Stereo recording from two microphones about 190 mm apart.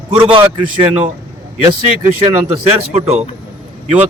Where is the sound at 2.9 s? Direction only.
35° right (ahead or behind).